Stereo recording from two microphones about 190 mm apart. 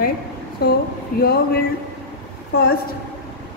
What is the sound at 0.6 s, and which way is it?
Speech, 55° left (ahead or behind).